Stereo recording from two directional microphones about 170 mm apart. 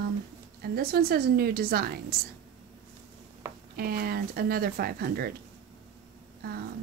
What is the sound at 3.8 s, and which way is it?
Speech, 60° right (ahead or behind).